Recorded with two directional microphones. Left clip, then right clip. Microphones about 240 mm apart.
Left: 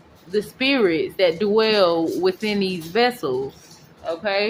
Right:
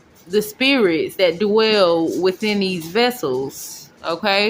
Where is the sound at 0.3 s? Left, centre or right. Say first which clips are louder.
Right 4 dB; centre.